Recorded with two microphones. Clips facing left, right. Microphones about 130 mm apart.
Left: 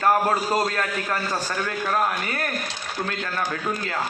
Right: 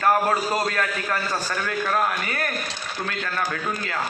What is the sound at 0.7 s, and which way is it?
A man's voice, 25° left (ahead or behind).